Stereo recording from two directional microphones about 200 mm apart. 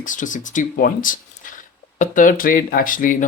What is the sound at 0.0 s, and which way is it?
Speech, 40° left (ahead or behind).